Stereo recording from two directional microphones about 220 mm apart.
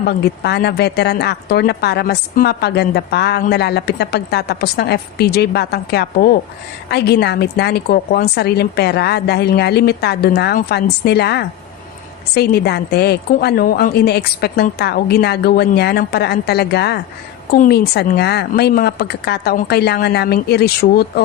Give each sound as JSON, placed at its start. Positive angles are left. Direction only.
{"t": 0.0, "sound": "speech", "side_deg": 50}